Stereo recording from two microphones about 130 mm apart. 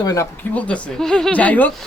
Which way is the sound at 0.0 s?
30° left (ahead or behind).